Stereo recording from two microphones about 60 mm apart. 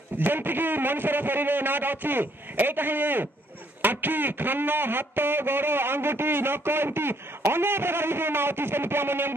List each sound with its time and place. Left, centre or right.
0.2 s speech: right